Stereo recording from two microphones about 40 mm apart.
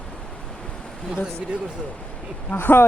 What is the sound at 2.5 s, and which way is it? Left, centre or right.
Speech, left.